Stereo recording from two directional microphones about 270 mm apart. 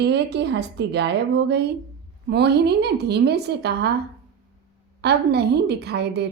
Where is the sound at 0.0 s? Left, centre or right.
Right.